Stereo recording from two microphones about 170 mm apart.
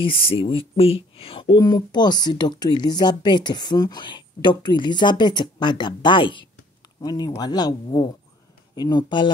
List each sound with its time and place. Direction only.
0.0 s speech: 30° left (ahead or behind)